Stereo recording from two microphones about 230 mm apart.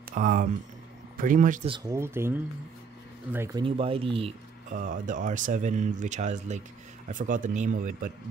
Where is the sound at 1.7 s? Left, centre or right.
Centre.